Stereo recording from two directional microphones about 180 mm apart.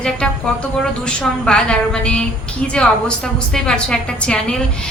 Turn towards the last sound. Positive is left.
turn(degrees=5)  # may be behind; listen again after turning